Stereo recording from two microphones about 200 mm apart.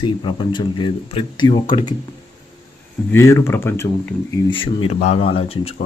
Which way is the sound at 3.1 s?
15° left (ahead or behind).